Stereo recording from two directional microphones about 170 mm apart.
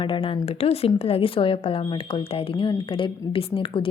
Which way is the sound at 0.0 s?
30° left (ahead or behind).